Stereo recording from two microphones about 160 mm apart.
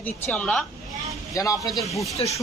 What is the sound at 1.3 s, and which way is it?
Speech, 20° left (ahead or behind).